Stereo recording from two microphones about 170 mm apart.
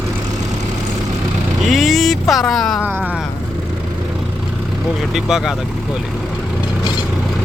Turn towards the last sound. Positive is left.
turn(degrees=0)  # may be behind; listen again after turning